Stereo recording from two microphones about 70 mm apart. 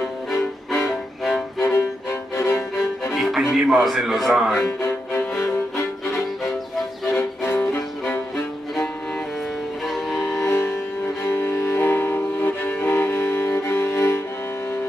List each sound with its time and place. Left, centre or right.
1.6 s music: left
3.1 s music: centre
3.5 s a man's voice: centre
4.6 s speech: left
7.4 s music: left
9.8 s music: centre
10.4 s music: left